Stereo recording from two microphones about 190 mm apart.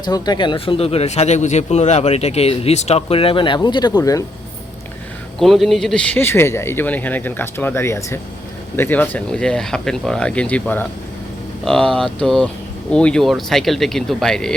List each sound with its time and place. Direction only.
0.0 s speech: 20° left (ahead or behind)
5.4 s speech: centre (ahead or behind)